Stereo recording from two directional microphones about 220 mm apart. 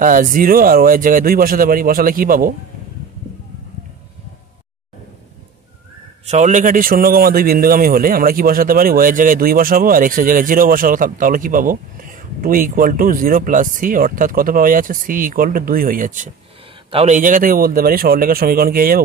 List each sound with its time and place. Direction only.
0.0 s a man's voice: 40° right (ahead or behind)
6.2 s a man's voice: 30° right (ahead or behind)